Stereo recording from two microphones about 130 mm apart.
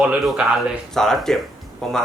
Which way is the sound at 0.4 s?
10° right (ahead or behind).